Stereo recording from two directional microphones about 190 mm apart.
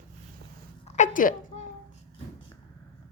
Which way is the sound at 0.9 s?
40° left (ahead or behind).